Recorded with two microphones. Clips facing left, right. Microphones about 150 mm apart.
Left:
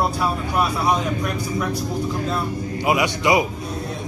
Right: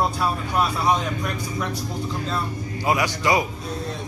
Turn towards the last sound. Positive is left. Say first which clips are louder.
# left 3 dB
turn(degrees=20)  # may be behind; listen again after turning